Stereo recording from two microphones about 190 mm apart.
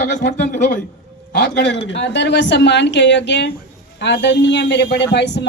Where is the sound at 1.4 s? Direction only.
65° left (ahead or behind).